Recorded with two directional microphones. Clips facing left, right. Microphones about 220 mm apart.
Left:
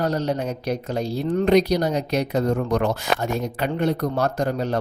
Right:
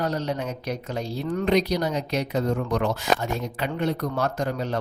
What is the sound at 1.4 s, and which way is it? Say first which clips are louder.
Speech: left 4 dB; 45° left (ahead or behind).